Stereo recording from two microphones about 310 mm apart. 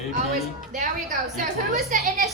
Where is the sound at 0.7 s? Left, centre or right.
Right.